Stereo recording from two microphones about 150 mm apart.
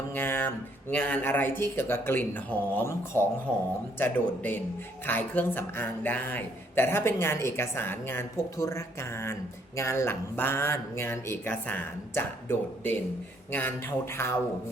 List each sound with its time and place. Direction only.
0.1 s a man's voice: 15° left (ahead or behind)